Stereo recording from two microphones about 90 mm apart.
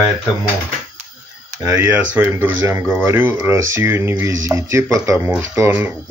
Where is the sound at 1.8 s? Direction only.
15° right (ahead or behind).